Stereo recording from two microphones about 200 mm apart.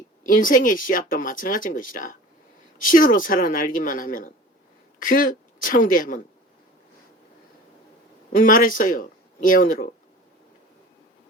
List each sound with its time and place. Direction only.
0.3 s a woman's voice: 45° left (ahead or behind)
8.3 s speech: 45° left (ahead or behind)